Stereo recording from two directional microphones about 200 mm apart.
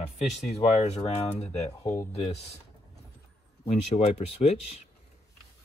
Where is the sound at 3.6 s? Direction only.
35° left (ahead or behind).